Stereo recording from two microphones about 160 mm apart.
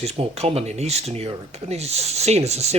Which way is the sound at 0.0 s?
40° right (ahead or behind).